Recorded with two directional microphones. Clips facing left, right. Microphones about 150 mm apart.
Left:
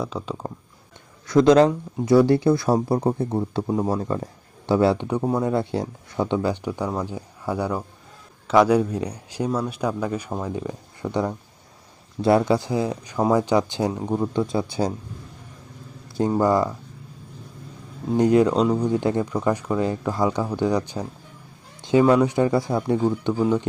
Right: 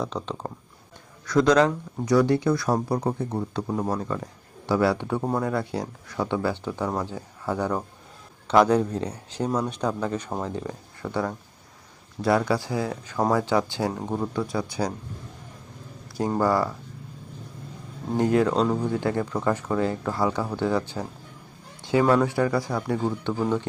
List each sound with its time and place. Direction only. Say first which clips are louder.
0.0 s speech: left 1 dB; 5° left (ahead or behind)
1.3 s speech: left 4 dB; 25° left (ahead or behind)
3.7 s speech: left 4 dB; 15° left (ahead or behind)
3.9 s speech: left 3 dB; 30° left (ahead or behind)
14.0 s speech: left 4 dB; centre (ahead or behind)
14.3 s speech: left 4 dB; 25° left (ahead or behind)
16.4 s speech: left 2 dB; 20° left (ahead or behind)
18.2 s speech: left 4 dB; 20° left (ahead or behind)